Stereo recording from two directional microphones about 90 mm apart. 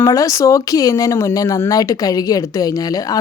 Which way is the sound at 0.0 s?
40° left (ahead or behind).